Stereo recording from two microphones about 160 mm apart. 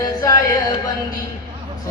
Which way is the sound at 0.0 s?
25° left (ahead or behind).